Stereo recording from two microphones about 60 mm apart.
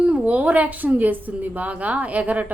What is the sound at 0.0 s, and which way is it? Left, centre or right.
A woman's voice, centre.